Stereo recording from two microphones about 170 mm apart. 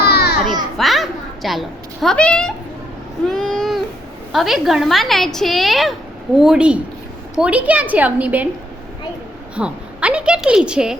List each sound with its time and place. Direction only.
0.1 s children playing: 65° left (ahead or behind)
0.8 s a woman's voice: centre (ahead or behind)
3.2 s vehicle: centre (ahead or behind)
4.3 s a woman's voice: centre (ahead or behind)
9.6 s a woman's voice: 5° right (ahead or behind)